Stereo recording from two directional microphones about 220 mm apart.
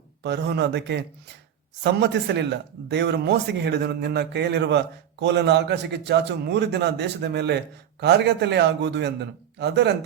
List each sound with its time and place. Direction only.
0.2 s a man's voice: 50° right (ahead or behind)